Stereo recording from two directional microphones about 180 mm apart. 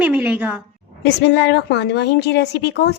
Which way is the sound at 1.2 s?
70° left (ahead or behind).